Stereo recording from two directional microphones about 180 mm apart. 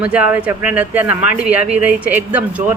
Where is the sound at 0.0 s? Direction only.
5° right (ahead or behind).